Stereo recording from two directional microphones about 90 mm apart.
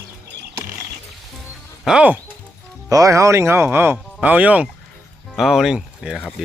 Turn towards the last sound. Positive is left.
turn(degrees=-5)  # may be behind; listen again after turning